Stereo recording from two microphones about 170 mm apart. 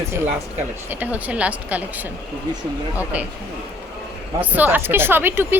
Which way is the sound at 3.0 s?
10° right (ahead or behind).